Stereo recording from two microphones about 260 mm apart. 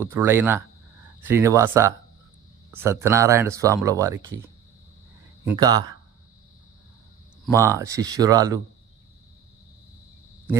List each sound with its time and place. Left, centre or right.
0.0 s speech: centre
5.5 s speech: centre
7.5 s speech: centre